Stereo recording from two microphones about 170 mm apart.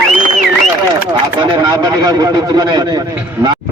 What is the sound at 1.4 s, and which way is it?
Speech, 25° right (ahead or behind).